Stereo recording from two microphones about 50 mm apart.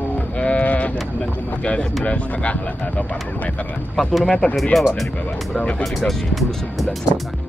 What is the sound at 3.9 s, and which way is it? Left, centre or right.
Speech, centre.